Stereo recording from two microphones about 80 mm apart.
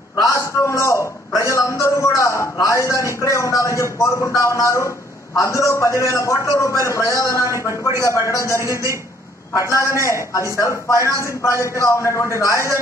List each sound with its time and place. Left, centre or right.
0.1 s a sound: left
5.4 s a man's voice: left
8.6 s a man's voice: right
9.6 s a man's voice: left